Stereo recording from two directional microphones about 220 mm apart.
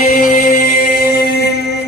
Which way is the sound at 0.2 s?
40° left (ahead or behind).